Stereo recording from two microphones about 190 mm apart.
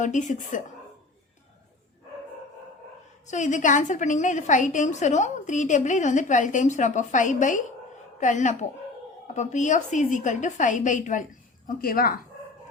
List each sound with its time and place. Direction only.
0.0 s a woman's voice: 40° left (ahead or behind)
3.2 s a woman's voice: 40° left (ahead or behind)